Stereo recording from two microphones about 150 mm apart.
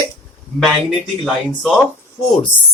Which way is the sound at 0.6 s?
Centre (ahead or behind).